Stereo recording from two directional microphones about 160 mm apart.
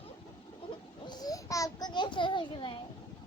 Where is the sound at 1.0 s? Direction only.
25° left (ahead or behind).